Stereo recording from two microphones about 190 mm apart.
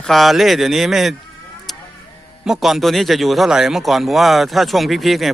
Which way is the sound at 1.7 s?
Centre (ahead or behind).